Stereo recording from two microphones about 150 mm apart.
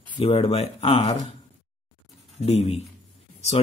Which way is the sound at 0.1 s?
40° left (ahead or behind).